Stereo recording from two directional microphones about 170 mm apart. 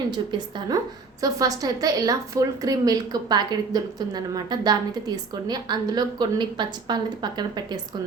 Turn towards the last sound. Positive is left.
turn(degrees=-25)  # may be behind; listen again after turning